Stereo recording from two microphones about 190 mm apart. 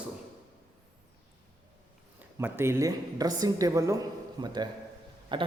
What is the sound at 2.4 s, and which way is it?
A woman's voice, 15° right (ahead or behind).